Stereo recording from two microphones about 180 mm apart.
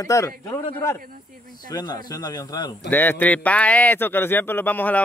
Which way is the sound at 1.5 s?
20° left (ahead or behind).